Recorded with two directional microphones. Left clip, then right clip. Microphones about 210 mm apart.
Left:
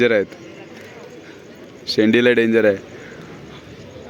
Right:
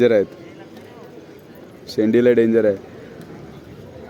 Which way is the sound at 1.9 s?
5° left (ahead or behind).